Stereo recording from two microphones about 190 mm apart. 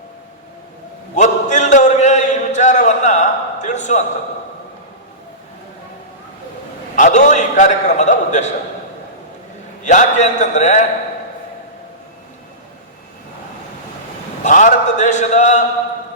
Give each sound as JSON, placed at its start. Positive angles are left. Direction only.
{"t": 1.1, "sound": "a sound", "side_deg": 40}
{"t": 6.9, "sound": "a man's voice", "side_deg": 40}
{"t": 9.8, "sound": "a man's voice", "side_deg": 40}
{"t": 14.4, "sound": "a man's voice", "side_deg": 40}